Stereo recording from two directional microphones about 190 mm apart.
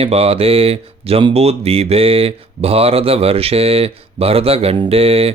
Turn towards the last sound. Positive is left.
turn(degrees=-30)  # may be behind; listen again after turning